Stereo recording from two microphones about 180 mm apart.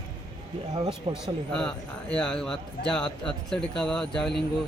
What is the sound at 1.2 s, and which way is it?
Speech, 5° left (ahead or behind).